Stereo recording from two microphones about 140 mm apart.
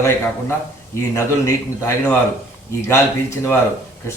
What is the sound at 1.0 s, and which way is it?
Speech, 20° left (ahead or behind).